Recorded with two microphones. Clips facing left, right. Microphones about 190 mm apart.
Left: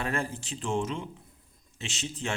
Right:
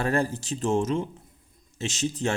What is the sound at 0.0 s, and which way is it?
Speech, 40° right (ahead or behind).